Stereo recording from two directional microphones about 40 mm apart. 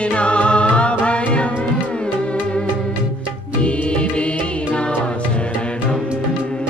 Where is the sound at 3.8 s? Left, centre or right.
Left.